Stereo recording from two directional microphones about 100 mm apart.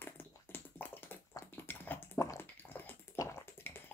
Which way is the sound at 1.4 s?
20° left (ahead or behind).